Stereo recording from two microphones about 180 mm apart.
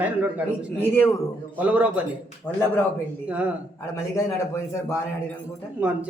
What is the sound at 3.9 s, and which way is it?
Speech, 15° left (ahead or behind).